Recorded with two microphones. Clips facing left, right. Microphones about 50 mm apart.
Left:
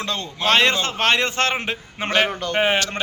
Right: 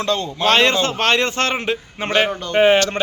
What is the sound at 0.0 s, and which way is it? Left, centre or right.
A man's voice, centre.